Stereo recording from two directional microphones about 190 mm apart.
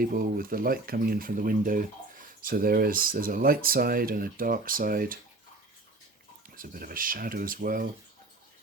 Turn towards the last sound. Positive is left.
turn(degrees=-45)  # may be behind; listen again after turning